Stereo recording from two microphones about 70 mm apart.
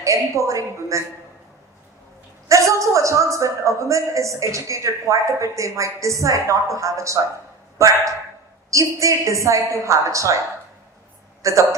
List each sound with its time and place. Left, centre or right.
0.0 s a man's voice: right
2.5 s a man's voice: right
11.4 s a man's voice: right